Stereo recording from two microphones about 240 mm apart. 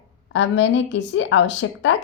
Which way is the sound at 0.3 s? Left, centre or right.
Left.